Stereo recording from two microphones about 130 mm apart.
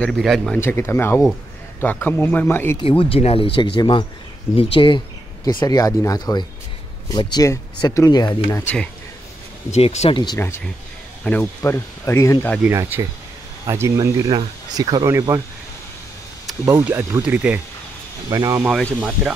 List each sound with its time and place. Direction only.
0.2 s speech: centre (ahead or behind)
0.6 s speech: 20° left (ahead or behind)
2.8 s speech: 45° left (ahead or behind)
8.5 s speech: 20° left (ahead or behind)
9.7 s speech: 55° left (ahead or behind)
11.3 s speech: 15° left (ahead or behind)
12.6 s speech: 15° right (ahead or behind)
16.6 s speech: 15° right (ahead or behind)
18.3 s speech: 30° right (ahead or behind)
18.7 s speech: centre (ahead or behind)